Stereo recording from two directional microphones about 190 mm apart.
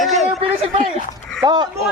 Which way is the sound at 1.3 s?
20° right (ahead or behind).